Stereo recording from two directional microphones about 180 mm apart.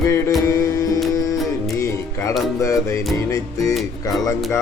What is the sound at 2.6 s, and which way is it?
Speech, 15° left (ahead or behind).